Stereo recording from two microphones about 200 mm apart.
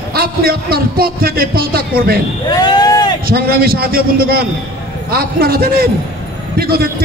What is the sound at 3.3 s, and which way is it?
Speech, 50° right (ahead or behind).